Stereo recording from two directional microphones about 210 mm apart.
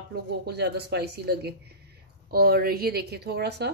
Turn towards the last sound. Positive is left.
turn(degrees=-55)  # may be behind; listen again after turning